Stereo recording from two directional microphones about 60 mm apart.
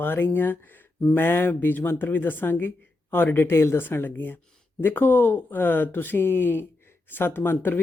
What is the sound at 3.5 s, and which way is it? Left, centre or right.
Speech, left.